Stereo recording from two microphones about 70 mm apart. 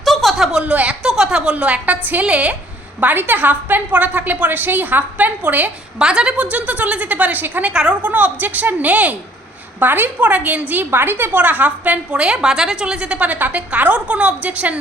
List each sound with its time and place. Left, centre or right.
0.0 s a sound: centre
0.6 s a woman's voice: centre
1.0 s a woman's voice: centre; by 5.7 s right
6.0 s a woman's voice: centre
7.7 s a woman's voice: centre